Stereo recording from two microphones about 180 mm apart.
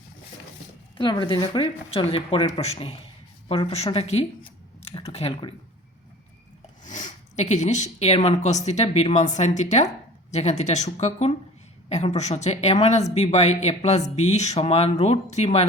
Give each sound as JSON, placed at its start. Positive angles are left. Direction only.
{"t": 0.9, "sound": "speech", "side_deg": 25}
{"t": 6.8, "sound": "speech", "side_deg": 45}